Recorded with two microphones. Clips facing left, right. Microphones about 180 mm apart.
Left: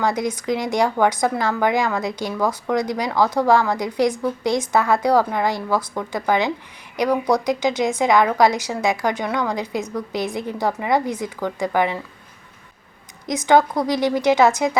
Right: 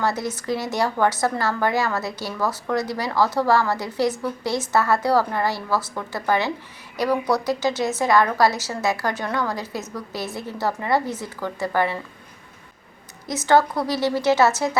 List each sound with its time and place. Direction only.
0.0 s a woman's voice: 15° left (ahead or behind)
13.2 s a woman's voice: 15° left (ahead or behind)